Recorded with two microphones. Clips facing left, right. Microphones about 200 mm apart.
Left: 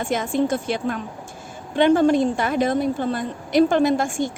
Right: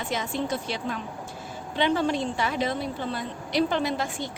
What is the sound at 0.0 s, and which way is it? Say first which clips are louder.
Speech: left 8 dB; 50° left (ahead or behind).